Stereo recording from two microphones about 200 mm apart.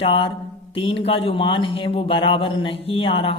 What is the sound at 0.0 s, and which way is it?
A man's voice, 25° left (ahead or behind).